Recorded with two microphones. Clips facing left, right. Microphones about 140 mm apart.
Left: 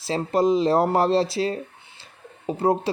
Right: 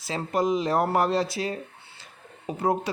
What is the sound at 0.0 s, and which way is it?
A man's voice, 30° left (ahead or behind).